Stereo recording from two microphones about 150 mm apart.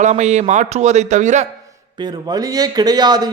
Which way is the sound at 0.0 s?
50° right (ahead or behind).